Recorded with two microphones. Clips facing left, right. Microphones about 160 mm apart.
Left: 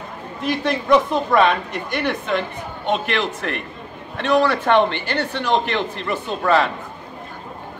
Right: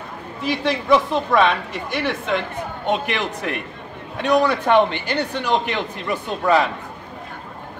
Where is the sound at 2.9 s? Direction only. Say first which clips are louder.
Left 1 dB; 15° right (ahead or behind).